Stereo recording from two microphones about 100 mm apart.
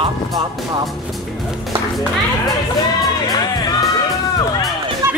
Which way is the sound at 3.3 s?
45° left (ahead or behind).